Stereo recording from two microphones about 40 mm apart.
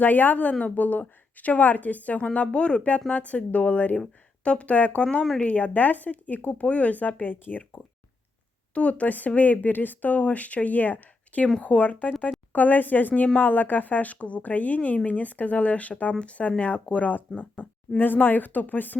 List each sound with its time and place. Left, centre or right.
0.0 s speech: left
8.7 s speech: left
17.1 s speech: left